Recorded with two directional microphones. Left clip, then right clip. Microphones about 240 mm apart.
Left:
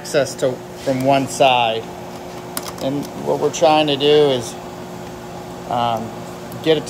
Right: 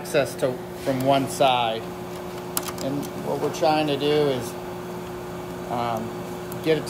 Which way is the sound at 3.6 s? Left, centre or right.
Left.